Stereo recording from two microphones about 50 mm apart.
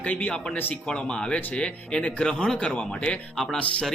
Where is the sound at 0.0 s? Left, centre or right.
Left.